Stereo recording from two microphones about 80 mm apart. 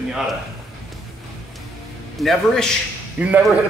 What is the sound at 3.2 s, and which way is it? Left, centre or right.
Speech, centre.